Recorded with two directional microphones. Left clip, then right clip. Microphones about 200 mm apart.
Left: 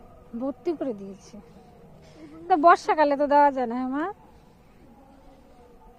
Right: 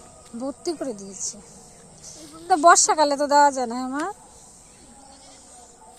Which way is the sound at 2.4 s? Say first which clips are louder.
Right 3 dB; centre (ahead or behind).